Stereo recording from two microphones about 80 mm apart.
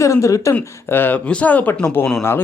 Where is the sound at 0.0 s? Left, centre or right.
Left.